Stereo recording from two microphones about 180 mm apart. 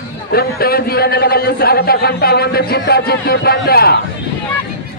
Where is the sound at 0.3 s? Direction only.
60° left (ahead or behind).